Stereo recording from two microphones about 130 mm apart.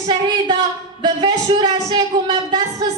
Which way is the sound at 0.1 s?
35° right (ahead or behind).